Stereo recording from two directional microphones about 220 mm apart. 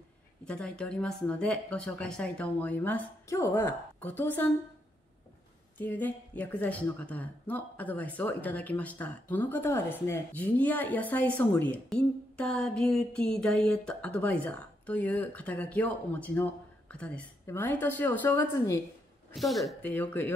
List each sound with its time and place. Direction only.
0.5 s speech: 5° left (ahead or behind)
5.8 s speech: 10° left (ahead or behind)